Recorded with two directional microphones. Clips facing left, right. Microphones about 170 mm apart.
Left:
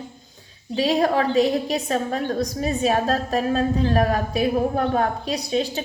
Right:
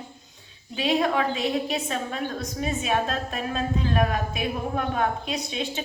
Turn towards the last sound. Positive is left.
turn(degrees=35)  # may be behind; listen again after turning